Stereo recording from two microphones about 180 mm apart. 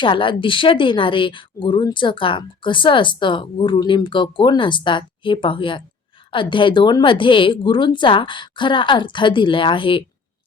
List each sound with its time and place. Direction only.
0.0 s speech: 25° left (ahead or behind)